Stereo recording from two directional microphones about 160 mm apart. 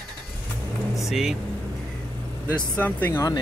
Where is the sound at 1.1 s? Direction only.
Centre (ahead or behind).